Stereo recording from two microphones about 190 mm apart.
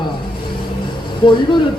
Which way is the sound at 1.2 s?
25° left (ahead or behind).